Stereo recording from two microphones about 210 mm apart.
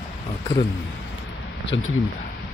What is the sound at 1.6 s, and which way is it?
Speech, 60° left (ahead or behind).